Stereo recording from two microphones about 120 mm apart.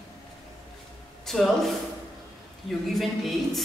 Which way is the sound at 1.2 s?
Centre (ahead or behind).